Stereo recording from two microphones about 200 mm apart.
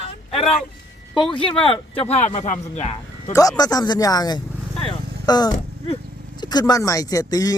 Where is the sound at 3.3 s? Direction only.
15° left (ahead or behind).